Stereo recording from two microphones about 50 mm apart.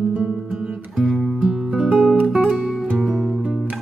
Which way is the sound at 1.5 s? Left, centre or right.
Centre.